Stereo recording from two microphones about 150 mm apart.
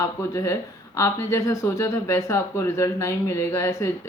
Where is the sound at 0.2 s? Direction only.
20° left (ahead or behind).